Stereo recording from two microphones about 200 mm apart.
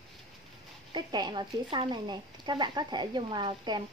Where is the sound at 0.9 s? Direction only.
20° right (ahead or behind).